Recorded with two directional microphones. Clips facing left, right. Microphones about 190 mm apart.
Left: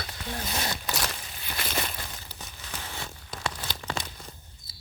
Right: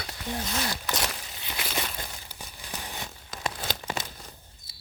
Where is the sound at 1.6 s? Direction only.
Centre (ahead or behind).